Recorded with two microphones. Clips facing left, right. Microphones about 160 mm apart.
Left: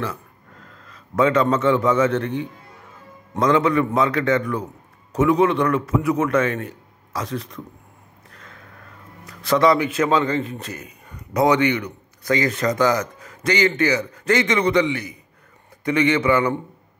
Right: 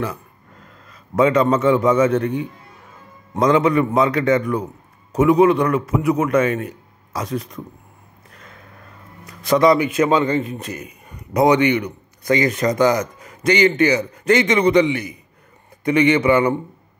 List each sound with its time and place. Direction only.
0.8 s a man's voice: 15° right (ahead or behind)
8.3 s a sound: 20° right (ahead or behind)
9.2 s a man's voice: 15° right (ahead or behind)